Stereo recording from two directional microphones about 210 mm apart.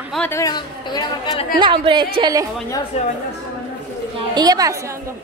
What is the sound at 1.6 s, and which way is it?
Speech, 25° right (ahead or behind).